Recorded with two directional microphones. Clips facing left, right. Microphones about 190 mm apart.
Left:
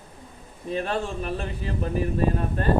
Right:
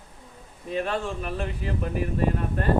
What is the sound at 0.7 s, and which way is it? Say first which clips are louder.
Speech: left 1 dB; 30° left (ahead or behind).